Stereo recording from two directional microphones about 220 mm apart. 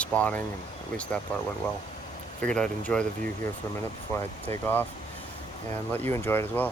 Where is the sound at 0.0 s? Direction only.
5° left (ahead or behind).